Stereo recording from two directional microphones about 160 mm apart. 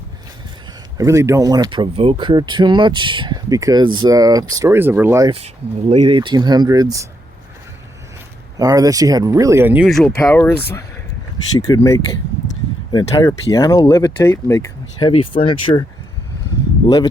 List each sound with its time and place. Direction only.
0.9 s speech: 20° right (ahead or behind)
5.9 s speech: 40° right (ahead or behind)
8.5 s speech: 25° right (ahead or behind); by 15.0 s 20° left (ahead or behind)
15.0 s speech: 35° left (ahead or behind)
16.8 s speech: 25° left (ahead or behind)